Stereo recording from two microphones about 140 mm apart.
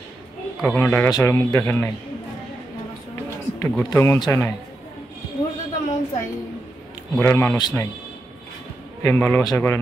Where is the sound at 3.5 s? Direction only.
15° left (ahead or behind).